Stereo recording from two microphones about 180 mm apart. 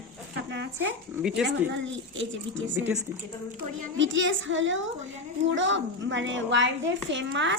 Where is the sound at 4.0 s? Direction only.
90° right.